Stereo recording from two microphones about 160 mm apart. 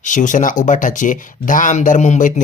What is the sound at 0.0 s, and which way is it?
Speech, 50° left (ahead or behind).